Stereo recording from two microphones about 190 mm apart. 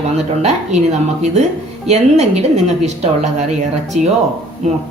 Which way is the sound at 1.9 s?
35° right (ahead or behind).